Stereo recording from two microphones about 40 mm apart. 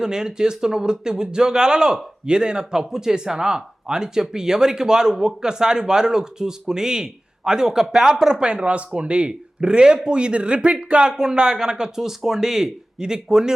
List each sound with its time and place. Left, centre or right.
0.0 s speech: centre